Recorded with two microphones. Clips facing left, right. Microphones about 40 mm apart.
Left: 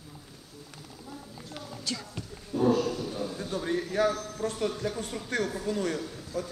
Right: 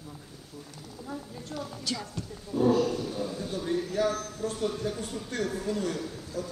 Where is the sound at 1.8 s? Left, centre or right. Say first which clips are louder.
Even; centre.